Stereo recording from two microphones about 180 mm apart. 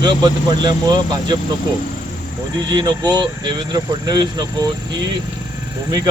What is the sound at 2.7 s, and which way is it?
Speech, 25° right (ahead or behind).